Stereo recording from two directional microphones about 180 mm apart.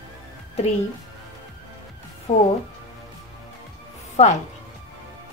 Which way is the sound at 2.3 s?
40° left (ahead or behind).